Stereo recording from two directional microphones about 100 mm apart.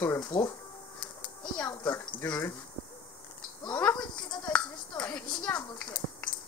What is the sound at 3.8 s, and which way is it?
A child's voice, 10° left (ahead or behind).